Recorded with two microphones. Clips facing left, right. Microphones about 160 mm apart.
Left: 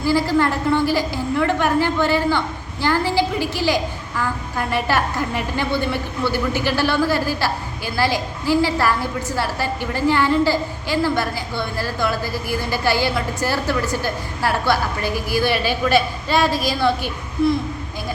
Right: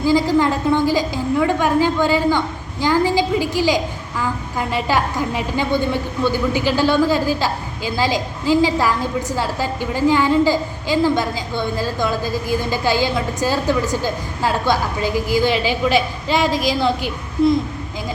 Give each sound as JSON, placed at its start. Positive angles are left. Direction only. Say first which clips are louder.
{"t": 0.0, "sound": "a woman's voice", "louder": "right 2 dB", "side_deg": -15}